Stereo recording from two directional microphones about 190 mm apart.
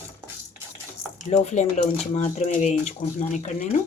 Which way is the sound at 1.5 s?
40° left (ahead or behind).